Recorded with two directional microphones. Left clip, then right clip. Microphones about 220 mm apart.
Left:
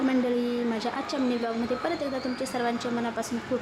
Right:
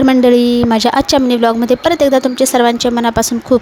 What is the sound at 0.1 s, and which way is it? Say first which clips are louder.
A woman's voice: right 17 dB; 45° right (ahead or behind).